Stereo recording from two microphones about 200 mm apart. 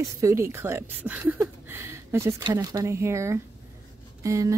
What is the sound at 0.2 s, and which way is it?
A woman's voice, 15° right (ahead or behind).